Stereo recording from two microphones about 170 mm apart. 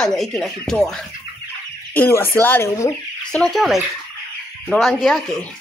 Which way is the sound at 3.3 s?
5° left (ahead or behind).